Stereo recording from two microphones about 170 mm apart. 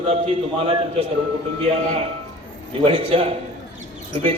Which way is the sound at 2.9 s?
35° right (ahead or behind).